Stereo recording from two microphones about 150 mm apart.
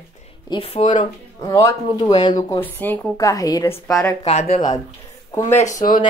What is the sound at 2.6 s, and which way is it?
Speech, 15° left (ahead or behind).